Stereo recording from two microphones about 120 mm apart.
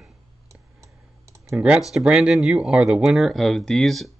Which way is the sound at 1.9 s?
5° right (ahead or behind).